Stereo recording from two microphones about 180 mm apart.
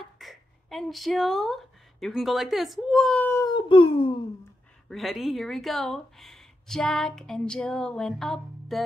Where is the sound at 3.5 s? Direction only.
30° left (ahead or behind).